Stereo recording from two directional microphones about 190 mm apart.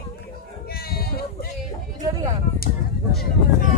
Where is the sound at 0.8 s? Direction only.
55° left (ahead or behind).